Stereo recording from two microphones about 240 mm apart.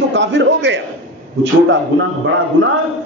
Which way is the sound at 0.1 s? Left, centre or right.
Right.